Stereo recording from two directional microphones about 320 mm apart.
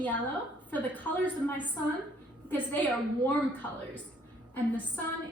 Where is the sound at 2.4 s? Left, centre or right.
Centre.